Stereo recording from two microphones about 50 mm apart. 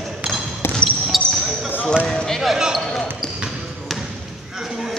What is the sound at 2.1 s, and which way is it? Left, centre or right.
Basketball bounce, centre.